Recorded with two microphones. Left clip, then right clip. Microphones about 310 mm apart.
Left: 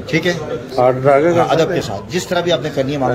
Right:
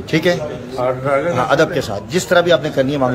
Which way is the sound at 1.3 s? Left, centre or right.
Centre.